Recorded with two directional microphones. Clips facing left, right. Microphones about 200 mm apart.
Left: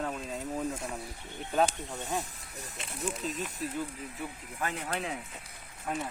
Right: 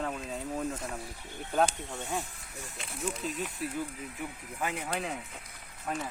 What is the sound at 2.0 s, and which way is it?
Speech, 40° left (ahead or behind).